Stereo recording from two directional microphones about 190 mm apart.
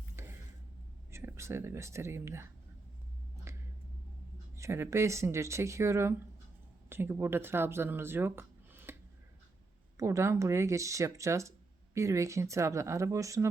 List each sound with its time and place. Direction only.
1.1 s speech: 15° right (ahead or behind)
3.5 s a sound: 15° right (ahead or behind)
4.5 s speech: 15° right (ahead or behind)
10.0 s speech: 15° right (ahead or behind)